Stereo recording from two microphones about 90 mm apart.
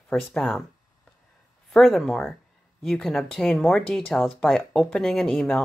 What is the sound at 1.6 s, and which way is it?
Speech, centre (ahead or behind).